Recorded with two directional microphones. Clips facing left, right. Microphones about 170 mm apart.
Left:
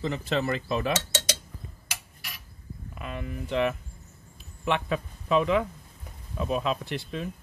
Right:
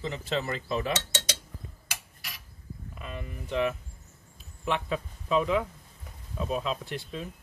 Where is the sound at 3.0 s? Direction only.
70° left (ahead or behind).